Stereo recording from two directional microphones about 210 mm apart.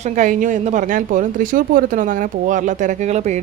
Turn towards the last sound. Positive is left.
turn(degrees=-35)  # may be behind; listen again after turning